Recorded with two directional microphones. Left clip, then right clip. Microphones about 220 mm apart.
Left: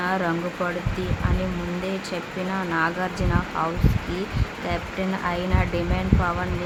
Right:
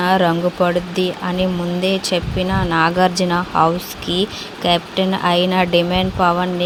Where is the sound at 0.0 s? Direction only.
30° right (ahead or behind).